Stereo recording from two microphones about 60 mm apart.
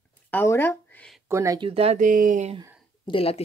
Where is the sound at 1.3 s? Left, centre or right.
Right.